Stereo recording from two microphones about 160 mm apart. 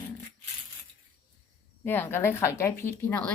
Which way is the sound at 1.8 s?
15° left (ahead or behind).